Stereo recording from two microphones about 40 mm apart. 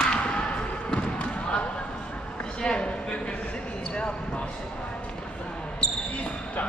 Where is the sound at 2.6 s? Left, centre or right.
Left.